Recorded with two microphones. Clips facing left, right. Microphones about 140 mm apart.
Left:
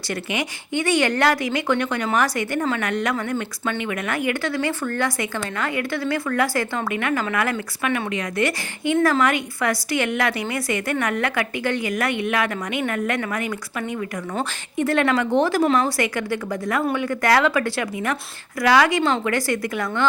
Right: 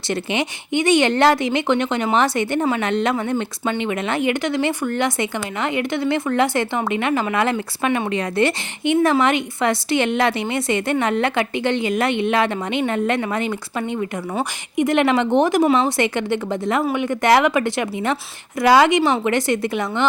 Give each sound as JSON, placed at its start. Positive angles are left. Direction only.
{"t": 0.1, "sound": "speech", "side_deg": -25}
{"t": 14.3, "sound": "speech", "side_deg": -15}